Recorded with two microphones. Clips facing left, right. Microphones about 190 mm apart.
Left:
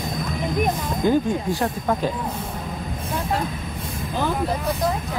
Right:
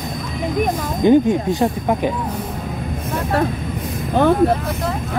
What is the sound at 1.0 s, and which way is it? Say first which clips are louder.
Speech: right 7 dB; 20° right (ahead or behind).